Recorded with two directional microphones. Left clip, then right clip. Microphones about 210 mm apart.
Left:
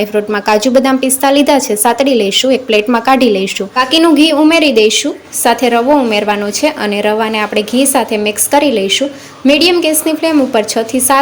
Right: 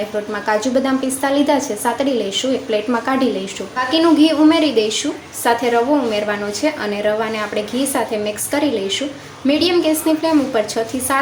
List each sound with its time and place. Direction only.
0.3 s a woman's voice: 40° left (ahead or behind)